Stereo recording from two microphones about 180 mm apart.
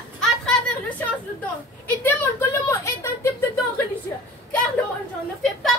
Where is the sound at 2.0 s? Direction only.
10° left (ahead or behind).